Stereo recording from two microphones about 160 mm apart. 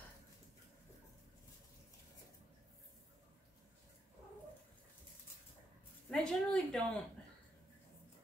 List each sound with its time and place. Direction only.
6.0 s speech: 5° left (ahead or behind)